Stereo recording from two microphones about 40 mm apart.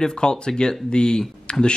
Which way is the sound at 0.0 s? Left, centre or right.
Centre.